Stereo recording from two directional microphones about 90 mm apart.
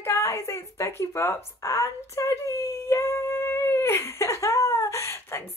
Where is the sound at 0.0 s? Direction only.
30° left (ahead or behind).